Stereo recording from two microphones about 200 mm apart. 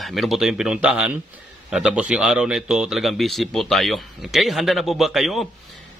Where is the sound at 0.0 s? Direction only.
Centre (ahead or behind).